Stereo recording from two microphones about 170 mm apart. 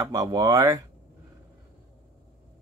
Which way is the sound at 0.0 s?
20° right (ahead or behind).